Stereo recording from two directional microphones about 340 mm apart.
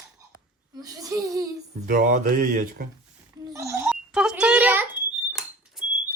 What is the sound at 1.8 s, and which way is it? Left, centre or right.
Speech, right.